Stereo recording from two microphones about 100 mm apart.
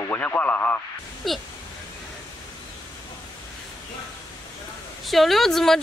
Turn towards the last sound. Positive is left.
turn(degrees=5)  # may be behind; listen again after turning